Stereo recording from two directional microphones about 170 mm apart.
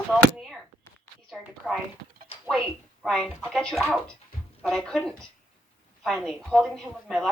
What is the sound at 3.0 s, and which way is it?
A woman's voice, 5° left (ahead or behind).